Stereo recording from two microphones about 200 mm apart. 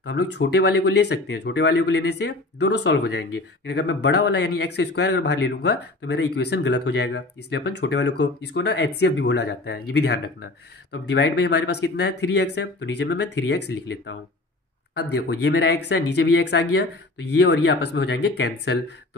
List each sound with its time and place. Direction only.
0.0 s speech: 60° left (ahead or behind)
15.0 s speech: 60° left (ahead or behind)